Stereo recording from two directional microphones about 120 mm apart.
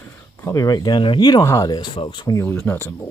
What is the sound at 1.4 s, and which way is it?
Speech, 25° left (ahead or behind).